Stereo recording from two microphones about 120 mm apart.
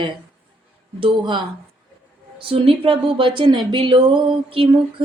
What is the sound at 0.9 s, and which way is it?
Speech, 45° right (ahead or behind).